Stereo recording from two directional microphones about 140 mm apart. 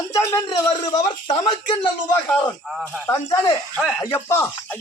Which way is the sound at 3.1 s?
25° left (ahead or behind).